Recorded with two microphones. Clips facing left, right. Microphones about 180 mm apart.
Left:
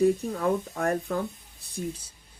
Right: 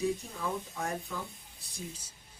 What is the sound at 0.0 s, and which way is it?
Speech, 60° left (ahead or behind).